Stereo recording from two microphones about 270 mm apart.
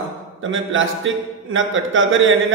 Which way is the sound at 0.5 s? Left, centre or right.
Right.